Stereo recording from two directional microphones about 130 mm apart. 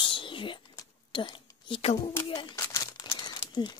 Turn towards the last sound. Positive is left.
turn(degrees=35)  # may be behind; listen again after turning